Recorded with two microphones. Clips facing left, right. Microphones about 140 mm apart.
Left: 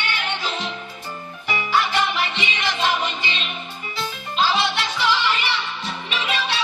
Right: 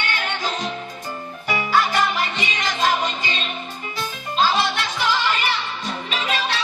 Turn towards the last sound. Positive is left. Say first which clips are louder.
# right 1 dB
turn(degrees=-45)  # may be behind; listen again after turning